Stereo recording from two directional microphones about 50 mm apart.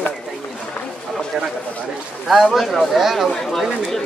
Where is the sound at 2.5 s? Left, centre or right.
Centre.